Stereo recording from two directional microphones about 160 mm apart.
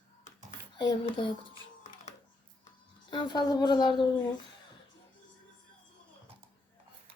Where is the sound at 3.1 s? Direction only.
30° left (ahead or behind).